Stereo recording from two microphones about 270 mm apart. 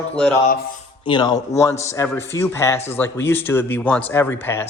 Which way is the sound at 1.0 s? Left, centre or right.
Centre.